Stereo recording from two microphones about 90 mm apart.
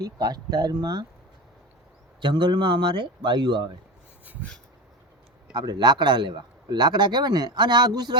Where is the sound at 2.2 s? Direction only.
55° right (ahead or behind).